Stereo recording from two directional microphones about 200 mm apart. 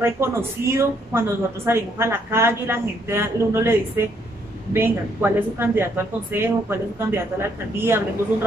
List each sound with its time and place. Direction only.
0.0 s speech: 10° right (ahead or behind)